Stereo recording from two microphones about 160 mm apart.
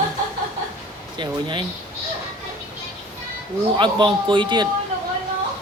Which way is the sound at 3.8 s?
30° right (ahead or behind).